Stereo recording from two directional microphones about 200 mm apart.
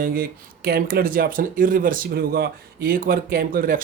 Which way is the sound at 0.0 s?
50° right (ahead or behind).